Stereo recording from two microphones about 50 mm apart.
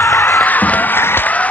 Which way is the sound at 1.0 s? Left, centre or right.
Left.